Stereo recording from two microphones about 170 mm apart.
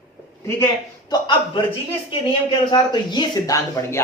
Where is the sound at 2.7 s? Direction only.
25° left (ahead or behind).